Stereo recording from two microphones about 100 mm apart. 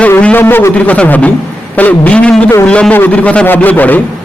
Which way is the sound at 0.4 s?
25° left (ahead or behind).